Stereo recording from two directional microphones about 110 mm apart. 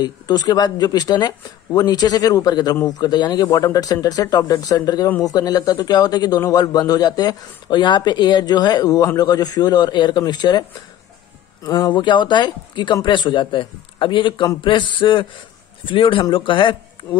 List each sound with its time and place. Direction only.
0.0 s speech: 40° left (ahead or behind)
11.6 s speech: 35° left (ahead or behind)